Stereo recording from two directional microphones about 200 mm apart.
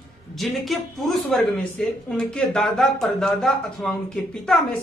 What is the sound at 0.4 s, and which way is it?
Speech, centre (ahead or behind).